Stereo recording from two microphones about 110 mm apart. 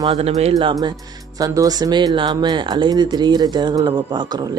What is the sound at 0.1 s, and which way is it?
Speech, 70° right (ahead or behind).